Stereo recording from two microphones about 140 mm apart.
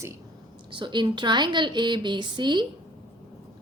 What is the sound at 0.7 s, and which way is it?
A woman's voice, 35° right (ahead or behind).